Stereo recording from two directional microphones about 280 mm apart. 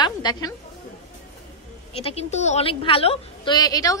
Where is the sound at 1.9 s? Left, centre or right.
Left.